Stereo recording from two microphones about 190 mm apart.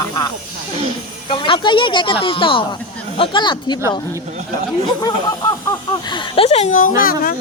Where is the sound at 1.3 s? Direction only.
25° left (ahead or behind).